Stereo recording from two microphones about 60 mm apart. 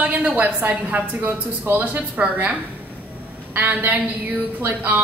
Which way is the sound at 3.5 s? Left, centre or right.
Right.